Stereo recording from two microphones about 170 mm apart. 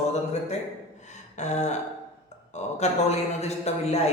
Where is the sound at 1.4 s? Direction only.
45° left (ahead or behind).